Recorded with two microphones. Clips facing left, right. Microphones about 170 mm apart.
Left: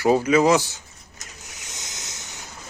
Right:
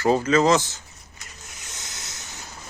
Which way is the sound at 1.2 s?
40° left (ahead or behind).